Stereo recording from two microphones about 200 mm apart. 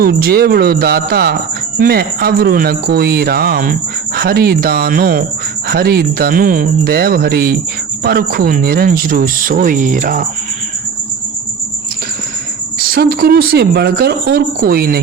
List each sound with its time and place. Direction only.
0.0 s speech: 50° right (ahead or behind)
12.9 s speech: 50° right (ahead or behind)